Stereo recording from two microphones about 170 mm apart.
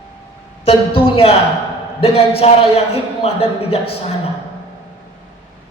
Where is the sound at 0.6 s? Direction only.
35° left (ahead or behind).